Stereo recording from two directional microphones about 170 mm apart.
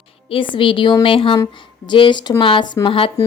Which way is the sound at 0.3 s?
30° left (ahead or behind).